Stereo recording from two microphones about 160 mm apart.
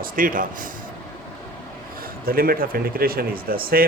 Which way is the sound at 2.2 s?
65° right (ahead or behind).